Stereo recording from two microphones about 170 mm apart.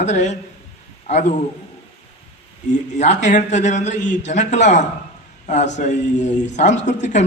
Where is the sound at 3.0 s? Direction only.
45° left (ahead or behind).